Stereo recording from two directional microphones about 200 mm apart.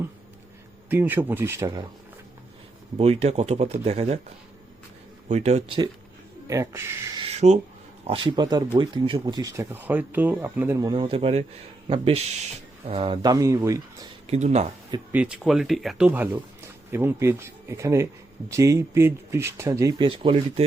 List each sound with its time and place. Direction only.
0.9 s speech: 10° right (ahead or behind)
3.0 s speech: 30° right (ahead or behind)
5.3 s speech: 35° right (ahead or behind)
6.5 s speech: 15° right (ahead or behind)
7.2 s a sound: 30° right (ahead or behind)
8.0 s speech: 25° right (ahead or behind)
11.0 s speech: 30° right (ahead or behind)
14.3 s speech: 35° right (ahead or behind)
15.1 s speech: 5° right (ahead or behind); by 20.7 s 30° right (ahead or behind)